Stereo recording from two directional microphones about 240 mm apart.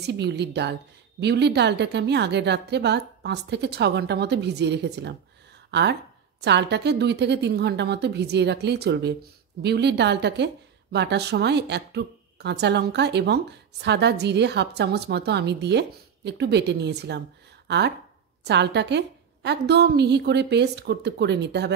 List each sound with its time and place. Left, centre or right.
0.0 s a woman's voice: right